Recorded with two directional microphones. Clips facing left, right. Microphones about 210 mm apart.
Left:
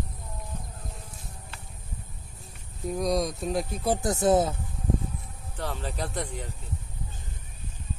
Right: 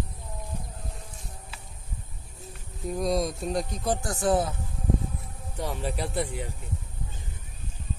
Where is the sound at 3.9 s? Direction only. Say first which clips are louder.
Left 4 dB; 20° left (ahead or behind).